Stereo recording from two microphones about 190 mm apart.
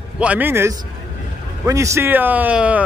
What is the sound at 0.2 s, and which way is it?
A man's voice, 10° right (ahead or behind).